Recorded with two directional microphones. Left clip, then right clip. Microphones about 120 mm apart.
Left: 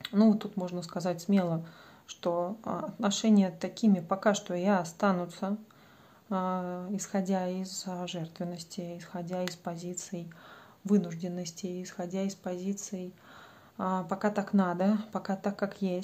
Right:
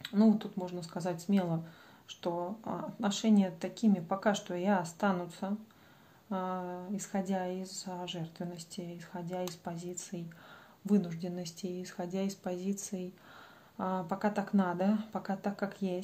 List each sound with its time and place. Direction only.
0.0 s speech: 35° left (ahead or behind); by 13.1 s 5° left (ahead or behind)
13.7 s speech: 20° left (ahead or behind)